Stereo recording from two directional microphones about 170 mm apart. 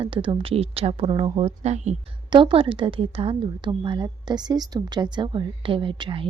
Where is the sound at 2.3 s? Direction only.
30° right (ahead or behind).